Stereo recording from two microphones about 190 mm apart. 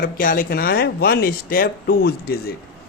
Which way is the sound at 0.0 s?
45° left (ahead or behind).